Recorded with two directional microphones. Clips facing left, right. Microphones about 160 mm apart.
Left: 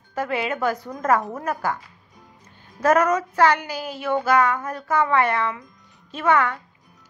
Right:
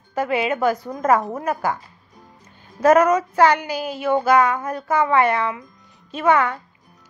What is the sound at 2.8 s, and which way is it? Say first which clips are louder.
A woman's voice: right 4 dB; 15° right (ahead or behind).